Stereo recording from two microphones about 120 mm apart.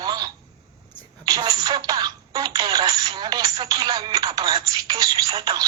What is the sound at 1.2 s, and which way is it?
Music, 35° right (ahead or behind).